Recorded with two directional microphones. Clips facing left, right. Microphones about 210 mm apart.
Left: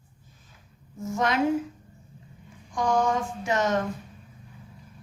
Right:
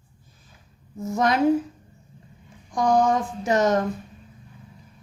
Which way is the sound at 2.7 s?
35° right (ahead or behind).